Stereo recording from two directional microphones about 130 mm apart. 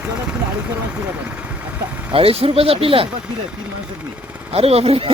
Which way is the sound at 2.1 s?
45° right (ahead or behind).